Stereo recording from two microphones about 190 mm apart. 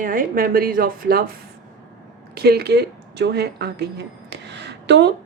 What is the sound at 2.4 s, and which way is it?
Speech, 55° right (ahead or behind).